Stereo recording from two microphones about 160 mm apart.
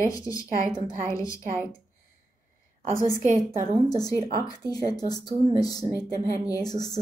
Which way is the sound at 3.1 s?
50° right (ahead or behind).